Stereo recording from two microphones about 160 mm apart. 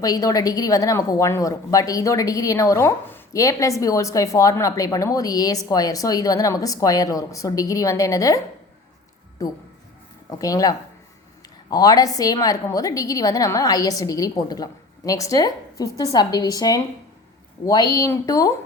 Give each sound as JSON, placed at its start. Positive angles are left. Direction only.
{"t": 0.0, "sound": "a woman's voice", "side_deg": 20}
{"t": 9.4, "sound": "a woman's voice", "side_deg": 20}